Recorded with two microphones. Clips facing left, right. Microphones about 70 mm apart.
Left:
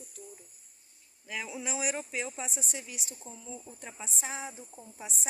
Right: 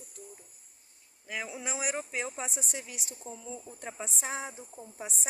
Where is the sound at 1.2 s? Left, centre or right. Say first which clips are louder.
Even; right.